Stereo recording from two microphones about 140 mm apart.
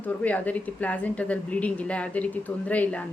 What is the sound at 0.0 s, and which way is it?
A woman's voice, 10° left (ahead or behind).